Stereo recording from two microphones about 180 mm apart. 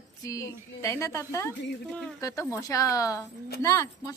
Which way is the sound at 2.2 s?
15° left (ahead or behind).